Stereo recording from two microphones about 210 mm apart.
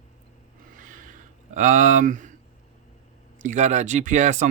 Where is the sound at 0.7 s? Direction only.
40° right (ahead or behind).